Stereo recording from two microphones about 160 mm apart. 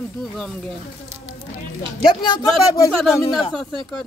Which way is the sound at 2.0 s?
30° left (ahead or behind).